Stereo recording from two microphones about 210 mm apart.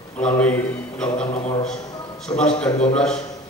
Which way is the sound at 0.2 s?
5° left (ahead or behind).